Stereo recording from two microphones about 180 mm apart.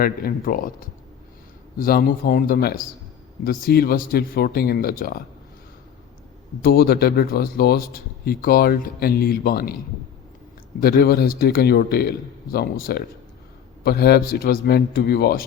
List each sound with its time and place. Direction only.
0.0 s a man's voice: 55° left (ahead or behind)
6.6 s a man's voice: 55° left (ahead or behind)